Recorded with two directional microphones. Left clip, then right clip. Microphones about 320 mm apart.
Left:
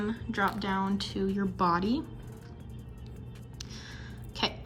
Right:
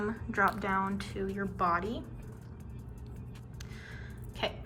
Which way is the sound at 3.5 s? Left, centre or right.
Centre.